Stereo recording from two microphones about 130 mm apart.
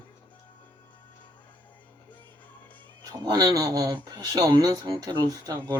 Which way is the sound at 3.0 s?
30° right (ahead or behind).